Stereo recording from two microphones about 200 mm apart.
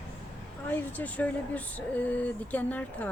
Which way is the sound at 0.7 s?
10° left (ahead or behind).